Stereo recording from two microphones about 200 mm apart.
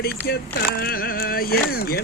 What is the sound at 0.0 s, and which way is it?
Speech, 50° left (ahead or behind).